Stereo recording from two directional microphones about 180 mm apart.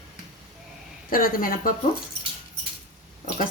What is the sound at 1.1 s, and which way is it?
Speech, 55° left (ahead or behind).